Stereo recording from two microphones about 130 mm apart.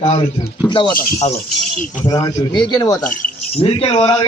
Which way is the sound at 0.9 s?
55° left (ahead or behind).